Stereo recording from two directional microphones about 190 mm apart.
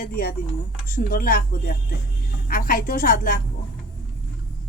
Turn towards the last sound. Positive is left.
turn(degrees=45)  # may be behind; listen again after turning